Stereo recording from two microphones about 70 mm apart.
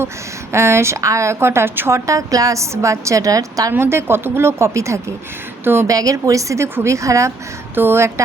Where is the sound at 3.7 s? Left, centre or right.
Right.